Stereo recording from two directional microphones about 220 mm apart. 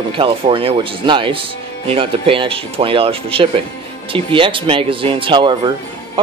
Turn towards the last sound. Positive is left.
turn(degrees=-20)  # may be behind; listen again after turning